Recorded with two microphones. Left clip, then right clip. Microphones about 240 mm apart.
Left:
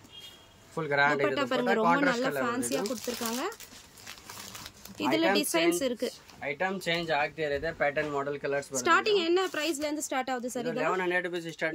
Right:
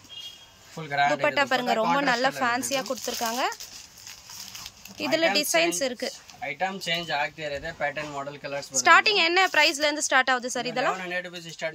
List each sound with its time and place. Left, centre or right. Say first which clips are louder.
0.7 s speech: right 2 dB; centre
1.2 s a woman's voice: right 4 dB; centre
4.9 s speech: right 3 dB; centre
8.8 s a woman's voice: right 7 dB; centre
11.0 s speech: left 2 dB; centre